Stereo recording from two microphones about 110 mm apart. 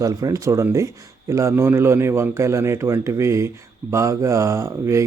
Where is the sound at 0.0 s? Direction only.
30° right (ahead or behind).